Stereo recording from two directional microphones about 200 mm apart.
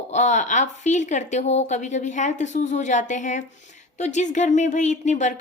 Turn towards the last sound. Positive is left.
turn(degrees=35)  # may be behind; listen again after turning